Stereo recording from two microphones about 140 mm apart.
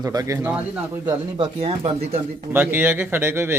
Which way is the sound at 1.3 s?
40° right (ahead or behind).